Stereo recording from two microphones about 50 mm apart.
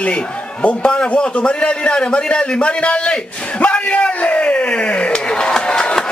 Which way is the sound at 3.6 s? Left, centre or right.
Left.